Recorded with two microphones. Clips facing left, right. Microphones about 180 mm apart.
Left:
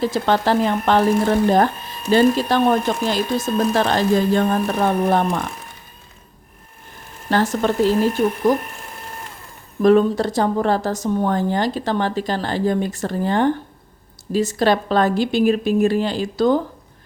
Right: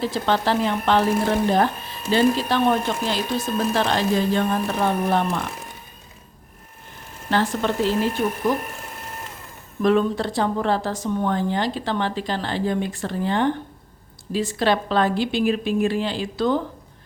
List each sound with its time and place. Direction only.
0.0 s speech: 45° left (ahead or behind)
7.3 s speech: 45° left (ahead or behind)
9.8 s speech: 40° left (ahead or behind)